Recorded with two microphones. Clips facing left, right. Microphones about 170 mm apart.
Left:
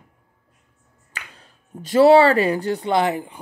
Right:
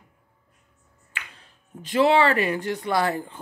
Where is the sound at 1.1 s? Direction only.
40° left (ahead or behind).